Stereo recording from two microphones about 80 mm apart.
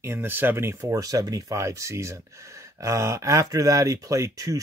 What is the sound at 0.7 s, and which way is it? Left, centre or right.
Speech, right.